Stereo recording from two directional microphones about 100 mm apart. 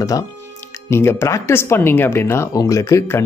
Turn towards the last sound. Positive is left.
turn(degrees=25)  # may be behind; listen again after turning